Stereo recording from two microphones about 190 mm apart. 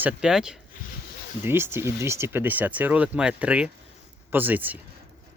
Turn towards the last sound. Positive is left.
turn(degrees=-10)  # may be behind; listen again after turning